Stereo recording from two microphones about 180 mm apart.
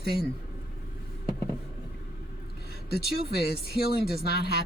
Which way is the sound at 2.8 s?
60° left (ahead or behind).